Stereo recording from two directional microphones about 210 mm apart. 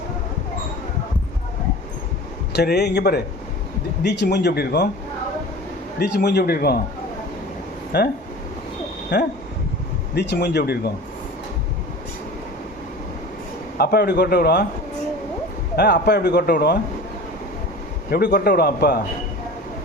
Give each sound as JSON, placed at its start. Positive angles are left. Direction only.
{"t": 2.5, "sound": "speech", "side_deg": 50}
{"t": 6.0, "sound": "speech", "side_deg": 50}
{"t": 7.9, "sound": "speech", "side_deg": 50}
{"t": 9.1, "sound": "speech", "side_deg": 50}
{"t": 13.7, "sound": "speech", "side_deg": 50}
{"t": 15.7, "sound": "speech", "side_deg": 50}
{"t": 18.1, "sound": "speech", "side_deg": 50}